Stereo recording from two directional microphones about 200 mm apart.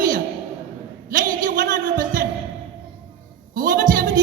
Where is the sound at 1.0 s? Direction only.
40° right (ahead or behind).